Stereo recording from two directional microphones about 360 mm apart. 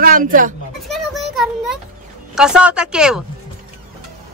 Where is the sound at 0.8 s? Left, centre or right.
Centre.